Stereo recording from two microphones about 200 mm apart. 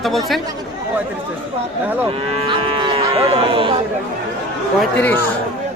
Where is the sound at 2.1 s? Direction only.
25° right (ahead or behind).